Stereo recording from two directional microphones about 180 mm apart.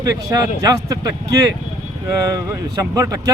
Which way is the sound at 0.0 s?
20° right (ahead or behind).